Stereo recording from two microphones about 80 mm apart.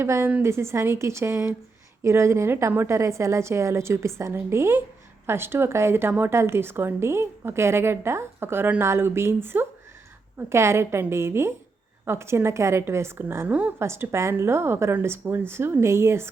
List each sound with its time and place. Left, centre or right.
0.0 s a woman's voice: right
13.5 s a woman's voice: centre
13.7 s a woman's voice: right